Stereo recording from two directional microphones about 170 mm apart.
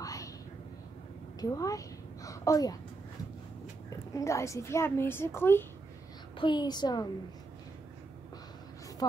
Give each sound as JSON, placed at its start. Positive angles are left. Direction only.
{"t": 0.0, "sound": "a sound", "side_deg": 20}
{"t": 1.4, "sound": "a child's voice", "side_deg": 20}
{"t": 4.1, "sound": "a woman's voice", "side_deg": 15}
{"t": 6.3, "sound": "a woman's voice", "side_deg": 25}